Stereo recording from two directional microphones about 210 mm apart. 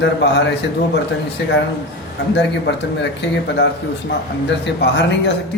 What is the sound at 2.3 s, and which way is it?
Speech, 55° left (ahead or behind).